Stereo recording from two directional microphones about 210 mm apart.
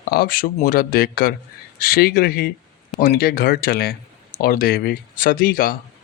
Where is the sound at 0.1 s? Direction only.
45° left (ahead or behind).